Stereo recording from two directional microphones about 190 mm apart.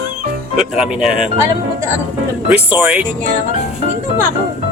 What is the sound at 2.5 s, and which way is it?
Speech, 5° right (ahead or behind).